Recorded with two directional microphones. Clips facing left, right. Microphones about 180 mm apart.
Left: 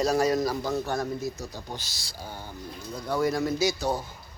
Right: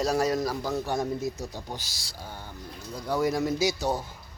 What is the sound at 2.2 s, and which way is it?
Speech, 5° left (ahead or behind).